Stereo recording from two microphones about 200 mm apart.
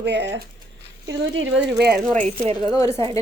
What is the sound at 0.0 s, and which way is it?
Speech, 60° right (ahead or behind).